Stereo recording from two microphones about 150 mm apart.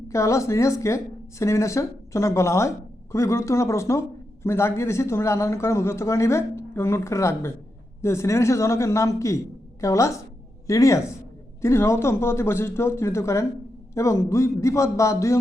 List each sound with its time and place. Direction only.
0.1 s a woman's voice: 20° left (ahead or behind)